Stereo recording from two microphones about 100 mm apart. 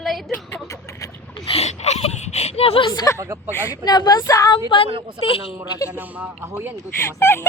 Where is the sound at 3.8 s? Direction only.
45° left (ahead or behind).